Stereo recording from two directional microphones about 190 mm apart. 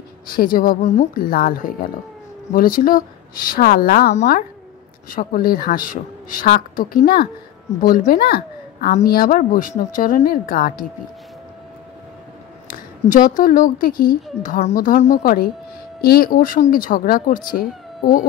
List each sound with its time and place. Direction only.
0.3 s a woman's voice: 50° left (ahead or behind)
12.6 s speech: 50° left (ahead or behind)